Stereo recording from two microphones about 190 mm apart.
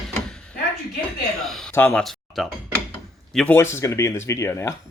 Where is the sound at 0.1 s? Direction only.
5° left (ahead or behind).